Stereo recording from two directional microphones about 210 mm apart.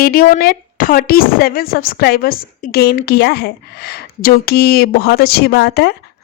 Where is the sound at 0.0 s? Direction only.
45° left (ahead or behind).